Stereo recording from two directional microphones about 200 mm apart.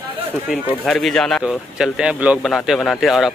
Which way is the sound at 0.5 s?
Centre (ahead or behind).